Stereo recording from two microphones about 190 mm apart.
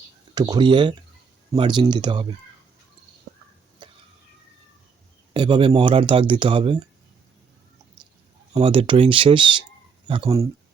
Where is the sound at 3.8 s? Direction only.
25° right (ahead or behind).